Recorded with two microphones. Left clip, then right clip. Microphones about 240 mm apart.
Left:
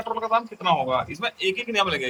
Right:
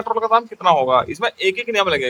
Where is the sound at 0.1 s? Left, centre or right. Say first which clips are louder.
Right 7 dB; centre.